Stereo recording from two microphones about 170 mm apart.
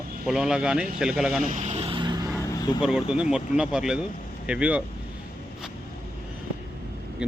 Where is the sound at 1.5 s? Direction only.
45° right (ahead or behind); by 2.2 s 25° right (ahead or behind).